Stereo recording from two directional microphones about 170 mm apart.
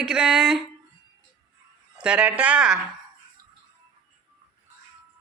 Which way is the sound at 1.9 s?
5° right (ahead or behind).